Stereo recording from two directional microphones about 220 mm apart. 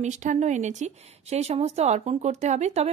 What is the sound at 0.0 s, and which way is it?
Speech, 35° right (ahead or behind).